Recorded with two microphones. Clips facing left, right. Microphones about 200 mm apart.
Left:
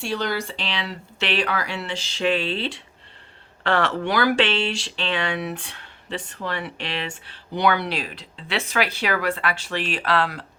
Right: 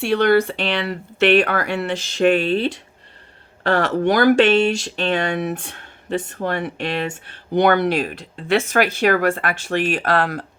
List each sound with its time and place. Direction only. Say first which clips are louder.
0.0 s speech: right 10 dB; 60° right (ahead or behind)